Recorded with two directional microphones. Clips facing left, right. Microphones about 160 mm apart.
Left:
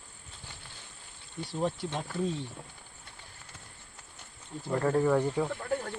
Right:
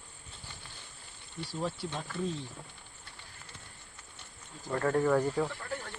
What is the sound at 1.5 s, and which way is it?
Speech, 25° left (ahead or behind).